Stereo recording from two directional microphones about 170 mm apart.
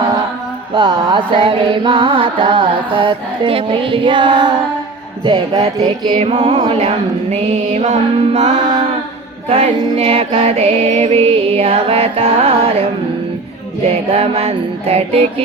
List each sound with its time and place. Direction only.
0.7 s music: 30° right (ahead or behind)
14.1 s music: 40° right (ahead or behind)